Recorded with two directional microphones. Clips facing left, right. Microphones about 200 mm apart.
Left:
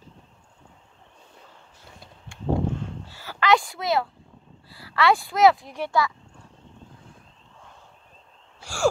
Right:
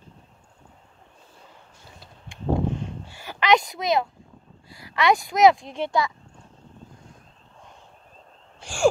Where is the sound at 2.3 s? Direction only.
15° right (ahead or behind).